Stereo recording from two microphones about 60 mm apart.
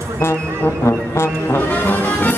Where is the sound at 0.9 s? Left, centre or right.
Left.